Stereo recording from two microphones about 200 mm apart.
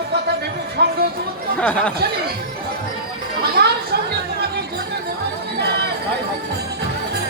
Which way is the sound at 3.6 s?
55° right (ahead or behind).